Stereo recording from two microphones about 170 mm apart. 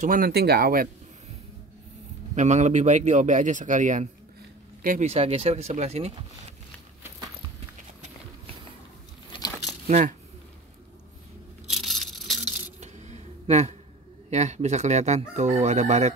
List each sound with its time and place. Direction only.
0.0 s speech: 55° right (ahead or behind)
2.3 s speech: 45° right (ahead or behind)
5.0 s speech: 35° right (ahead or behind)
9.8 s speech: 45° right (ahead or behind)
11.7 s a sound: centre (ahead or behind)
12.8 s a sound: 40° right (ahead or behind)
14.3 s speech: 40° right (ahead or behind)